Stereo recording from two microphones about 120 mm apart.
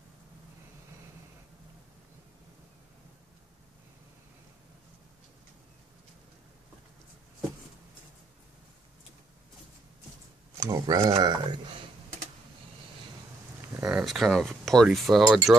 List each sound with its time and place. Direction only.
10.6 s speech: 30° right (ahead or behind)
13.8 s speech: 5° right (ahead or behind)